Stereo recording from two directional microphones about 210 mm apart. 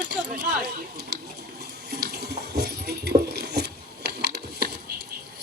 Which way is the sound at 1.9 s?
50° right (ahead or behind).